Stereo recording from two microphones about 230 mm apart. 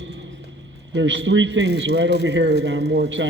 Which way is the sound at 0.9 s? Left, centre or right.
Right.